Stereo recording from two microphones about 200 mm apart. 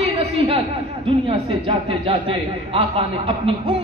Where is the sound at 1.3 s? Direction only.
25° right (ahead or behind).